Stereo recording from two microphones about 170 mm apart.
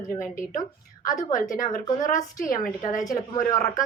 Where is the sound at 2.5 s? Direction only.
50° left (ahead or behind).